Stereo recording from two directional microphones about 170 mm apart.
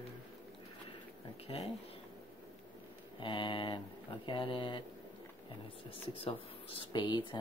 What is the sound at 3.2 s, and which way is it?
Speech, 30° left (ahead or behind).